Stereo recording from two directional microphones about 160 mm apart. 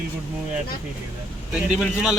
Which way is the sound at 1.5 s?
Centre (ahead or behind).